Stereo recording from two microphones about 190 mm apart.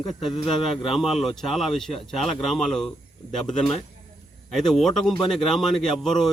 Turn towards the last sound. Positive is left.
turn(degrees=0)  # may be behind; listen again after turning